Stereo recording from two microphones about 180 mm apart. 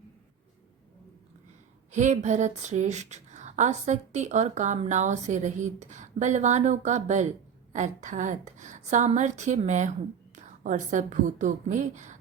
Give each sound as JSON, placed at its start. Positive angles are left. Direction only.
{"t": 1.9, "sound": "a woman's voice", "side_deg": -40}